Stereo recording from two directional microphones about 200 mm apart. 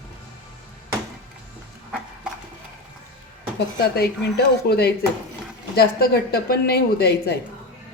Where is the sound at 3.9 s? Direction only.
55° left (ahead or behind).